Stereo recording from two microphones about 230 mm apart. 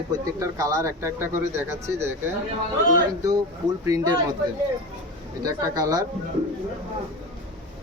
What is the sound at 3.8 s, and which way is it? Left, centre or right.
Speech, centre.